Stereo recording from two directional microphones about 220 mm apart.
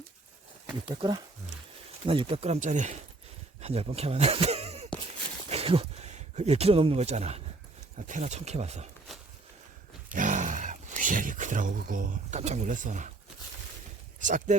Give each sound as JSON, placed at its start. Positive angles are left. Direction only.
{"t": 0.9, "sound": "speech", "side_deg": -20}
{"t": 10.1, "sound": "speech", "side_deg": -35}
{"t": 14.2, "sound": "speech", "side_deg": -35}